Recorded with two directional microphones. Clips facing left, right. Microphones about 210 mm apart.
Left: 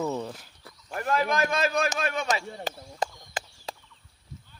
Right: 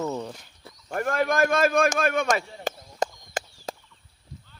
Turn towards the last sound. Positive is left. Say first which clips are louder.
# right 4 dB
turn(degrees=-45)  # may be behind; listen again after turning